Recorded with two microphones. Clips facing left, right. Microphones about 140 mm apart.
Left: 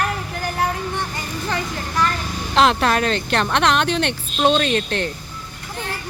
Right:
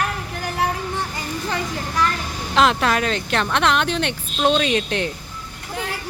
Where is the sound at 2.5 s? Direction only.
Centre (ahead or behind).